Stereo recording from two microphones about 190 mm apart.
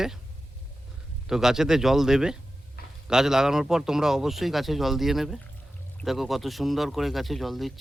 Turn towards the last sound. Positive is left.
turn(degrees=0)  # may be behind; listen again after turning